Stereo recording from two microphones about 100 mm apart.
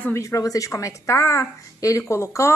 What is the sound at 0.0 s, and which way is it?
A woman's voice, 30° left (ahead or behind).